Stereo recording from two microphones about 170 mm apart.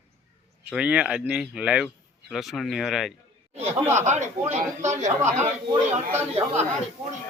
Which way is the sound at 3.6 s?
15° right (ahead or behind).